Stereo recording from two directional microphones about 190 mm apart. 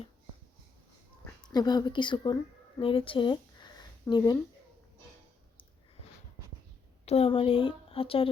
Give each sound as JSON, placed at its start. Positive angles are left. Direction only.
{"t": 1.4, "sound": "a woman's voice", "side_deg": 20}
{"t": 7.0, "sound": "a woman's voice", "side_deg": 30}